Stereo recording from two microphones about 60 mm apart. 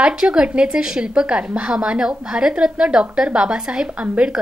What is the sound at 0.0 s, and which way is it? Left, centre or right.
A woman's voice, centre.